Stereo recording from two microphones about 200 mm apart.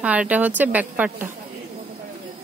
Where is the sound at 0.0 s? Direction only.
5° right (ahead or behind).